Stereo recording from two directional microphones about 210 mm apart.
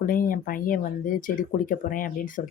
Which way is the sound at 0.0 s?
40° left (ahead or behind).